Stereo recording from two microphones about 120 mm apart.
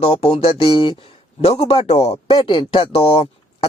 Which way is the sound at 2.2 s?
45° left (ahead or behind).